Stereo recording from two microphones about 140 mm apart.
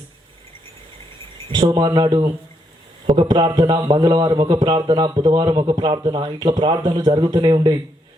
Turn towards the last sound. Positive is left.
turn(degrees=-30)  # may be behind; listen again after turning